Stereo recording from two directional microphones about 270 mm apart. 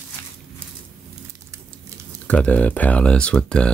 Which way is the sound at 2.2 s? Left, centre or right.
Centre.